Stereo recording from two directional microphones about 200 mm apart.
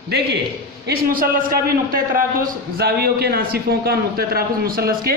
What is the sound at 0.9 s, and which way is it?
A man's voice, 45° right (ahead or behind).